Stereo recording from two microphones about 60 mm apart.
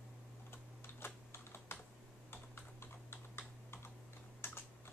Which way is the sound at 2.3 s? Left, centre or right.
Left.